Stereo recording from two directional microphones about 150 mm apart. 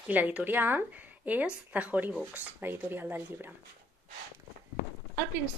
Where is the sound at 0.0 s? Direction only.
10° right (ahead or behind).